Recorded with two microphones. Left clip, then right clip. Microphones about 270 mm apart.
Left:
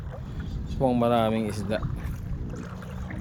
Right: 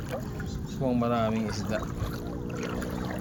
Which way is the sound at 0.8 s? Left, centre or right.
Centre.